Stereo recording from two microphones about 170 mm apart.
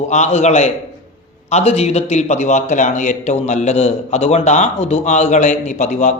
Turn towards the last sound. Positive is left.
turn(degrees=45)  # may be behind; listen again after turning